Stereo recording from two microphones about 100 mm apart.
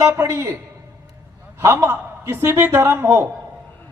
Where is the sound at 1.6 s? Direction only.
20° right (ahead or behind).